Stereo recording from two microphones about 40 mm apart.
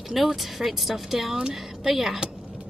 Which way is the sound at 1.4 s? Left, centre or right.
Centre.